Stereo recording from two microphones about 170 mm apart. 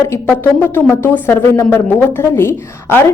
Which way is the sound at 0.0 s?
15° left (ahead or behind).